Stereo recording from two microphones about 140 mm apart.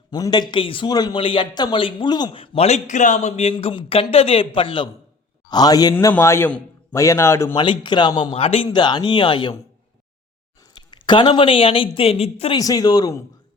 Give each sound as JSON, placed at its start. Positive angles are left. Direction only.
{"t": 0.1, "sound": "a man's voice", "side_deg": 30}
{"t": 7.5, "sound": "a man's voice", "side_deg": 35}
{"t": 10.6, "sound": "speech", "side_deg": 30}
{"t": 12.5, "sound": "speech", "side_deg": 25}